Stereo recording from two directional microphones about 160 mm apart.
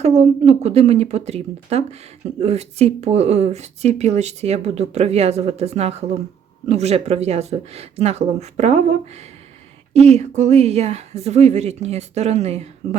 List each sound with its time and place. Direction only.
0.0 s a woman's voice: 45° right (ahead or behind)